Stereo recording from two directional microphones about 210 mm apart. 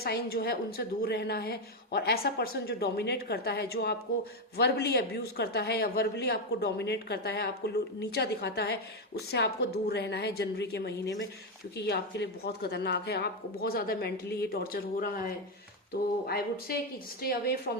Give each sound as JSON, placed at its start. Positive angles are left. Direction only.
{"t": 0.0, "sound": "speech", "side_deg": 45}